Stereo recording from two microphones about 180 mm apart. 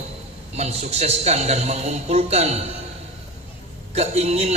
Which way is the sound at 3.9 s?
35° right (ahead or behind).